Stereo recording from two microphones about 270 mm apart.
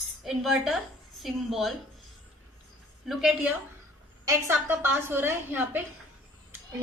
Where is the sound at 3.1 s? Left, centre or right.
Centre.